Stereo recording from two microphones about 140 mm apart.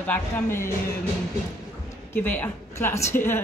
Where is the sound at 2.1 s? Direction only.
10° left (ahead or behind).